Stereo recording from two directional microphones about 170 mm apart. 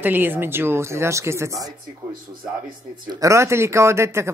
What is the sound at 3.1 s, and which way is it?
Speech, 20° right (ahead or behind).